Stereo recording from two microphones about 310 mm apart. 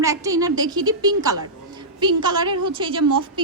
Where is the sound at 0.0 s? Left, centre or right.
Centre.